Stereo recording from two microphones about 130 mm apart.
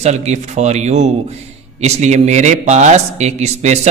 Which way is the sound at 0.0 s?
60° right (ahead or behind).